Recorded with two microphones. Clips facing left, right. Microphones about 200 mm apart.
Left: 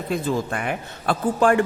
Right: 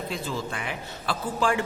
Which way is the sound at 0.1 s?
55° left (ahead or behind).